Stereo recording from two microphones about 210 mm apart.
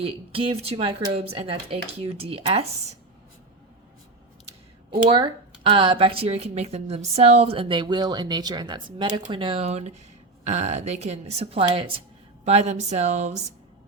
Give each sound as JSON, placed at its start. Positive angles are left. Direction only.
{"t": 0.0, "sound": "speech", "side_deg": -25}
{"t": 5.0, "sound": "speech", "side_deg": -25}